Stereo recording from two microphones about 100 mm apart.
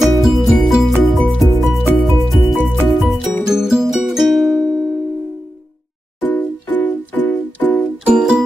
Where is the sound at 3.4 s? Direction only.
5° right (ahead or behind).